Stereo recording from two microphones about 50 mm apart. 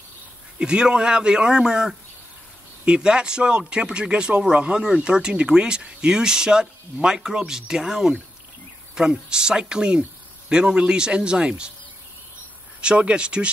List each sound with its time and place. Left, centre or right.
0.6 s speech: centre
12.8 s speech: centre